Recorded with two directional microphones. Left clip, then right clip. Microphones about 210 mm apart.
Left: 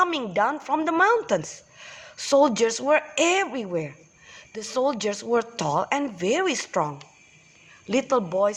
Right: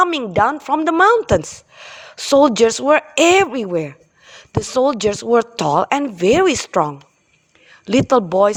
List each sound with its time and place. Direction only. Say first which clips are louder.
0.0 s a woman's voice: right 7 dB; 40° right (ahead or behind)